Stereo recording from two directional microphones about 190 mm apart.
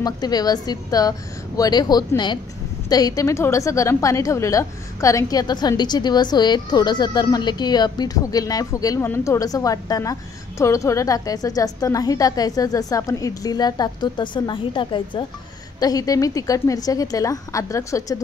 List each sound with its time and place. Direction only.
0.0 s a woman's voice: 20° left (ahead or behind)